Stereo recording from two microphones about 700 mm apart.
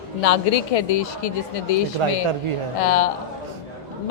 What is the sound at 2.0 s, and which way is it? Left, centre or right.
Speech, right.